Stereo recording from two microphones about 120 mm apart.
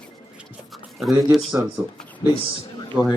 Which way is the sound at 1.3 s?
Centre (ahead or behind).